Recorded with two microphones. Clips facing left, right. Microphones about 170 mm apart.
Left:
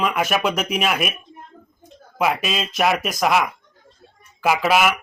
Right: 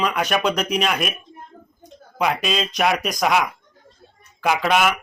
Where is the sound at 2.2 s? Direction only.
5° left (ahead or behind).